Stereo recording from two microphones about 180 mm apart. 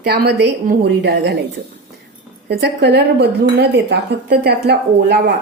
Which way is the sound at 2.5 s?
65° right (ahead or behind).